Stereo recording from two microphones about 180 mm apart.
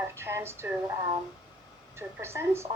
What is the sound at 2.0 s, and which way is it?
Speech, 15° right (ahead or behind).